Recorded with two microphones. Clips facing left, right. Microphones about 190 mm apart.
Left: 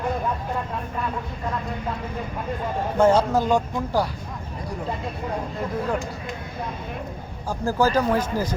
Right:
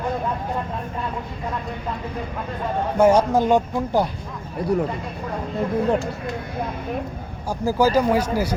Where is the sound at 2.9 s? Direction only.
10° right (ahead or behind).